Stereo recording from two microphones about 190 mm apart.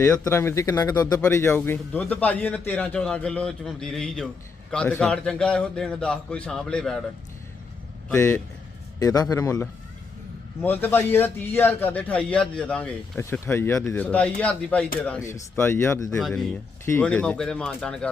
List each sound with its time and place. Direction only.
0.1 s a man's voice: 15° left (ahead or behind)
8.1 s speech: 15° left (ahead or behind)
16.2 s a man's voice: centre (ahead or behind)
16.8 s a man's voice: 10° left (ahead or behind)